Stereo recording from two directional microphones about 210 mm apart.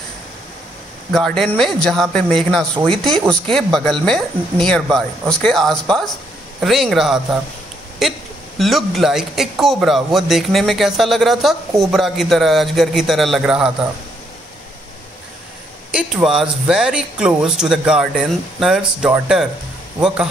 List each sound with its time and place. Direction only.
1.1 s speech: centre (ahead or behind)
15.9 s speech: 5° right (ahead or behind)